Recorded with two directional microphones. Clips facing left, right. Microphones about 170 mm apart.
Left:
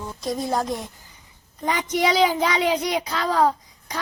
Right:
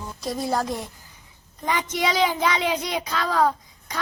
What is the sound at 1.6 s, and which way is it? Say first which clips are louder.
A child's voice: left 3 dB; 40° left (ahead or behind).